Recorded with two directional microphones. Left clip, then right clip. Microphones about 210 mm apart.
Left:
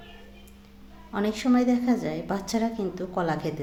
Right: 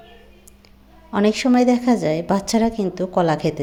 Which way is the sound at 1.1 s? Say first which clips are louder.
Right 8 dB; 35° right (ahead or behind).